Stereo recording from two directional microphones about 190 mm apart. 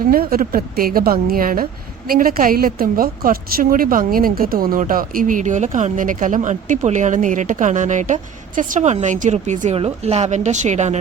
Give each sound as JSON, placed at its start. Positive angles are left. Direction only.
{"t": 0.0, "sound": "a woman's voice", "side_deg": -50}